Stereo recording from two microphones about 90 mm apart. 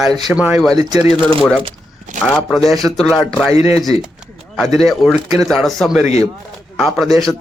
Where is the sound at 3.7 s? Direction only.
40° right (ahead or behind).